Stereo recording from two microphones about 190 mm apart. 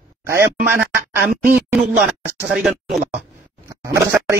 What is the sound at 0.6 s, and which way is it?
Speech, 10° right (ahead or behind).